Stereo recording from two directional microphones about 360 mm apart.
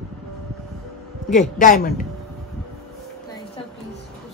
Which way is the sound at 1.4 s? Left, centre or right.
Left.